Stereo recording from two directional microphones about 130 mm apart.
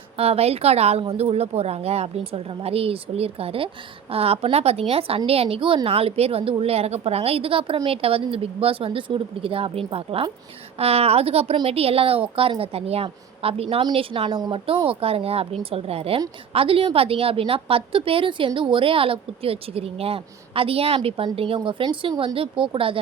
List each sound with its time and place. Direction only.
0.2 s a woman's voice: 50° right (ahead or behind)